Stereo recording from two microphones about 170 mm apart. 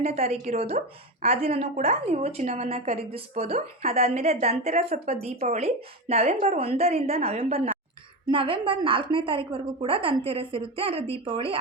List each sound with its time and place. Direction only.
0.0 s speech: 35° right (ahead or behind)